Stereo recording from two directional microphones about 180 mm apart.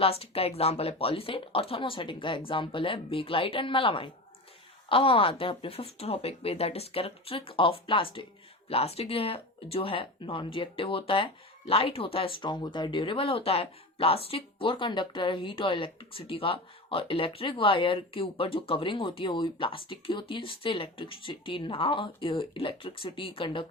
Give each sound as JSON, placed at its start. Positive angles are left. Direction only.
{"t": 0.0, "sound": "speech", "side_deg": 35}